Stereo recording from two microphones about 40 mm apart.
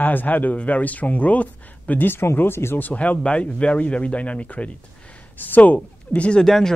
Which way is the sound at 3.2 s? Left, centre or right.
Left.